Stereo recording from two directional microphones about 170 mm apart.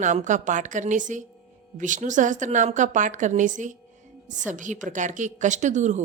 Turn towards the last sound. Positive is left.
turn(degrees=-45)  # may be behind; listen again after turning